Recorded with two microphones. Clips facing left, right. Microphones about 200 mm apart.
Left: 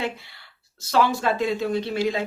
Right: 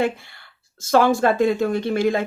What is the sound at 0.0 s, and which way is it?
Speech, 50° right (ahead or behind).